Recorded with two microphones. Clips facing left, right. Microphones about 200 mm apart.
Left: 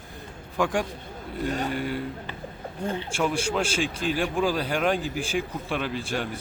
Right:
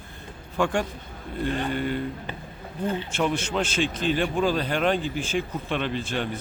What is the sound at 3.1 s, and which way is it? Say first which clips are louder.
Speech: left 2 dB; 10° left (ahead or behind).